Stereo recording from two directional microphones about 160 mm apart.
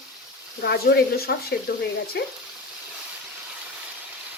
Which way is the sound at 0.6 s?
80° left.